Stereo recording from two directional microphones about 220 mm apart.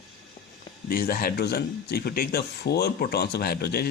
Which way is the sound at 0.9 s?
40° left (ahead or behind).